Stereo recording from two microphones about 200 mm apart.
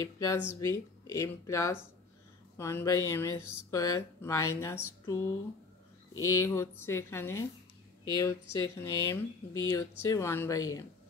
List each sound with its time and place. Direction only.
0.0 s speech: 15° left (ahead or behind)
6.1 s speech: 90° left
6.4 s speech: 15° left (ahead or behind)